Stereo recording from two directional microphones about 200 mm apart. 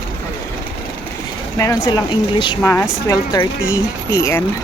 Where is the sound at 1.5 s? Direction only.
15° left (ahead or behind).